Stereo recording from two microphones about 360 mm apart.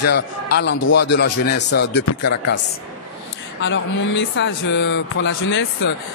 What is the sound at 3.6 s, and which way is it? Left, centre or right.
A man's voice, left.